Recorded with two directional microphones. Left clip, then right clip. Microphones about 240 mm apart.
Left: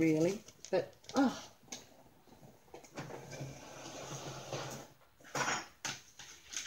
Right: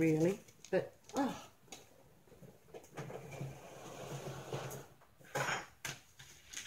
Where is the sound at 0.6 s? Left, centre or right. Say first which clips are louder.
Left 3 dB; left.